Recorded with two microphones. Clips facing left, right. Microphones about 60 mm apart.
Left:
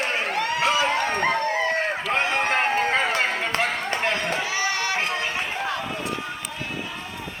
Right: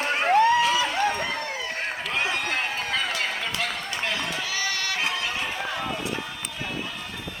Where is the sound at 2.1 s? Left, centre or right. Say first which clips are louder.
Left 4 dB; left.